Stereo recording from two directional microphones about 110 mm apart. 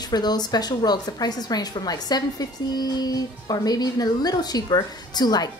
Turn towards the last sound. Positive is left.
turn(degrees=40)  # may be behind; listen again after turning